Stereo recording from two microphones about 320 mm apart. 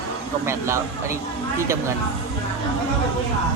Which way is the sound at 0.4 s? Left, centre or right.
Centre.